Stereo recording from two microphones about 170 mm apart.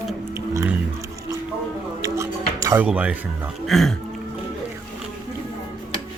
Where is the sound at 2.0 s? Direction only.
20° right (ahead or behind).